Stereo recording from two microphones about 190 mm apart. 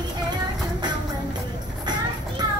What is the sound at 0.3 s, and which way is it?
Music, 20° right (ahead or behind).